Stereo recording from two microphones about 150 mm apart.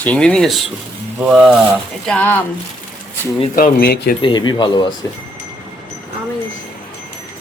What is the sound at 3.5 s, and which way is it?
Speech, 80° left.